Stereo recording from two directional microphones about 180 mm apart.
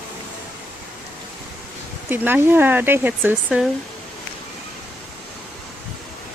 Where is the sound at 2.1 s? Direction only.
10° right (ahead or behind).